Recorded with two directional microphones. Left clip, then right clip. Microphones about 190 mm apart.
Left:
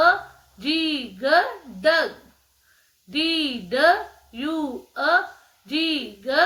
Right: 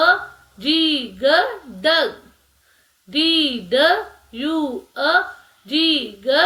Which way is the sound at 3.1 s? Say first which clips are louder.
Right 6 dB; 40° left (ahead or behind).